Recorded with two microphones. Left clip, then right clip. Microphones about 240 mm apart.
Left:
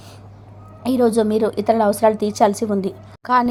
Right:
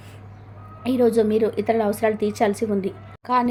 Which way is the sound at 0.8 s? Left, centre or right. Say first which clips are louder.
Left 2 dB; centre.